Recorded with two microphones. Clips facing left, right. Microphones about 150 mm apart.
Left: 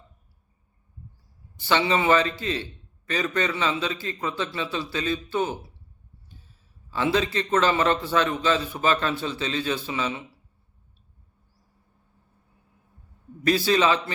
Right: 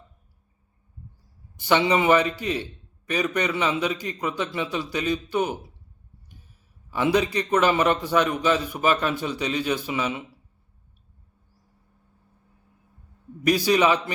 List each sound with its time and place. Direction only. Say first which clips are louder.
1.5 s a man's voice: right 2 dB; 15° right (ahead or behind)
6.9 s a man's voice: right 2 dB; 15° right (ahead or behind)
13.4 s a man's voice: right 1 dB; 15° right (ahead or behind)